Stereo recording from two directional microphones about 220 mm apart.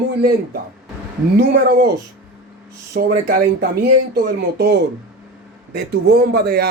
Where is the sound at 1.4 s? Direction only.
45° right (ahead or behind).